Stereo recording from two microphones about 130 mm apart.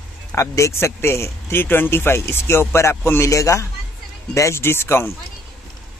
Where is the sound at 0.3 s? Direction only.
20° left (ahead or behind).